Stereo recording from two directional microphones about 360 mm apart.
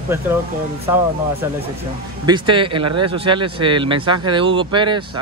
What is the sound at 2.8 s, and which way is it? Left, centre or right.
Speech, right.